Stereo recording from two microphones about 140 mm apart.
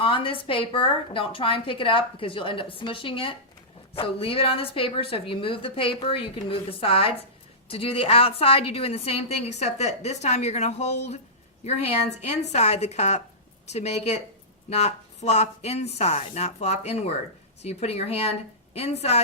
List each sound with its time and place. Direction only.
0.0 s a woman's voice: 40° left (ahead or behind)